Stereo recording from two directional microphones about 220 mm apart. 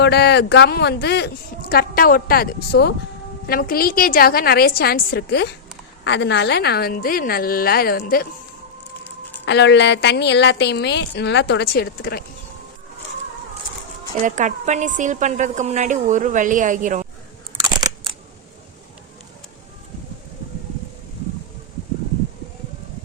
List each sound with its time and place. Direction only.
0.0 s speech: 50° left (ahead or behind)
9.5 s speech: 50° left (ahead or behind)
14.3 s a woman's voice: 35° right (ahead or behind)